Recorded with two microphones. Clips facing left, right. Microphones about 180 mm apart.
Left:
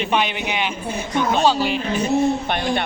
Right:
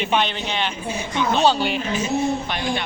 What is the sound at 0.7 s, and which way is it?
Speech, 50° left (ahead or behind).